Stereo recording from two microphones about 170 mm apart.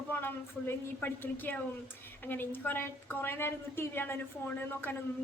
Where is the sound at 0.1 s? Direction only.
10° left (ahead or behind).